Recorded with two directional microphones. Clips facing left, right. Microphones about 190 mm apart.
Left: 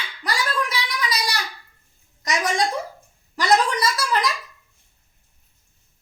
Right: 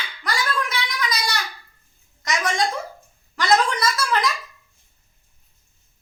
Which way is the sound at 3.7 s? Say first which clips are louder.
Even; 35° left (ahead or behind).